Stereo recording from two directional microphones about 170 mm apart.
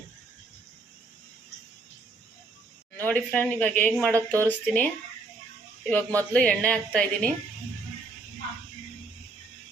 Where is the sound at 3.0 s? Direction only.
10° left (ahead or behind).